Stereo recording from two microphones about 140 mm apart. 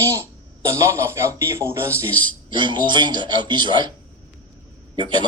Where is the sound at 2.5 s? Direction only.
35° right (ahead or behind).